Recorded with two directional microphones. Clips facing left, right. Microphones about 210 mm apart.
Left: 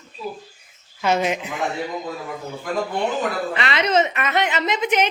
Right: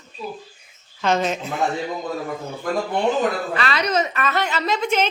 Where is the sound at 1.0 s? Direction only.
10° left (ahead or behind).